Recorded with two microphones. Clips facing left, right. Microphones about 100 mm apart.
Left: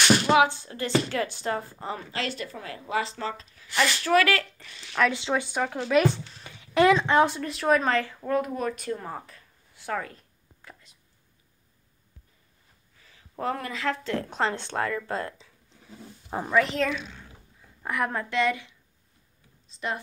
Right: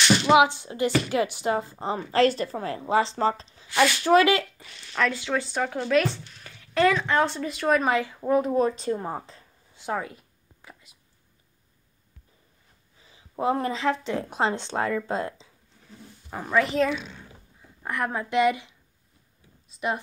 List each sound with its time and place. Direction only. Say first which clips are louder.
0.2 s speech: right 2 dB; 15° right (ahead or behind)
2.0 s speech: right 11 dB; 40° right (ahead or behind); by 4.5 s 20° right (ahead or behind)
5.1 s speech: even; 20° left (ahead or behind)
5.6 s speech: right 1 dB; centre (ahead or behind)
5.9 s speech: left 2 dB; 15° left (ahead or behind)
7.2 s speech: even; centre (ahead or behind)
7.8 s speech: right 2 dB; 15° right (ahead or behind)
8.5 s a sound: right 6 dB; 30° right (ahead or behind); by 10.9 s 5° right (ahead or behind)
13.0 s a sound: right 5 dB; 20° right (ahead or behind)
13.6 s speech: right 7 dB; 30° right (ahead or behind)
13.8 s speech: right 3 dB; 15° right (ahead or behind)
16.4 s speech: right 2 dB; 5° right (ahead or behind)
18.3 s speech: right 7 dB; 15° right (ahead or behind)
19.8 s speech: right 4 dB; 15° right (ahead or behind)